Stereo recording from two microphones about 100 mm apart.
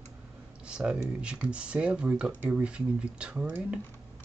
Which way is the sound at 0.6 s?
10° right (ahead or behind).